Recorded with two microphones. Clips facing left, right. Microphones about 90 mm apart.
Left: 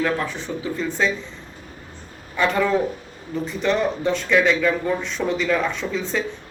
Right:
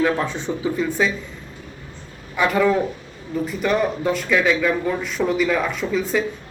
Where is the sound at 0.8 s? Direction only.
5° right (ahead or behind).